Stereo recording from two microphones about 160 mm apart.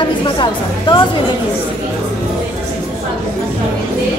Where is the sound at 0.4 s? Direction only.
30° left (ahead or behind).